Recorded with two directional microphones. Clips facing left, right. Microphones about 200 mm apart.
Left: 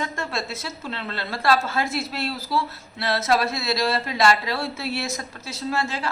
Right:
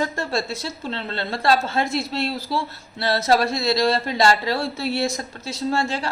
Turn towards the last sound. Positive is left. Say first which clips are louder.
# right 3 dB
turn(degrees=-30)  # may be behind; listen again after turning